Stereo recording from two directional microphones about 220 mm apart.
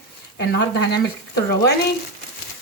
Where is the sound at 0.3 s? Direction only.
50° left (ahead or behind).